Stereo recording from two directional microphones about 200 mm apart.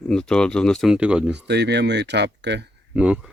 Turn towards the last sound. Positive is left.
turn(degrees=-5)  # may be behind; listen again after turning